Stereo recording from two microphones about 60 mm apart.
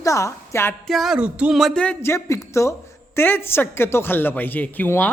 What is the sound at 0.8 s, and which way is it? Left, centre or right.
Speech, centre.